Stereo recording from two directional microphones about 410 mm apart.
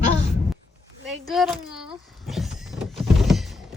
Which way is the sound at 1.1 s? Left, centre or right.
Centre.